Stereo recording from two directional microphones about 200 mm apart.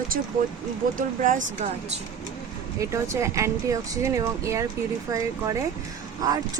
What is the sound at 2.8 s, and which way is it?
Speech, 15° right (ahead or behind).